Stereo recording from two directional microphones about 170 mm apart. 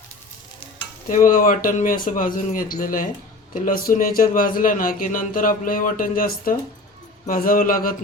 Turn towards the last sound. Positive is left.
turn(degrees=55)  # may be behind; listen again after turning